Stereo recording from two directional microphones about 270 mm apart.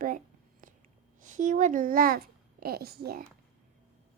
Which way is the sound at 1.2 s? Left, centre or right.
Right.